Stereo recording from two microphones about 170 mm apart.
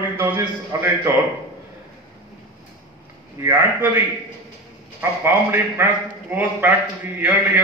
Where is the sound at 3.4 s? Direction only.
15° right (ahead or behind).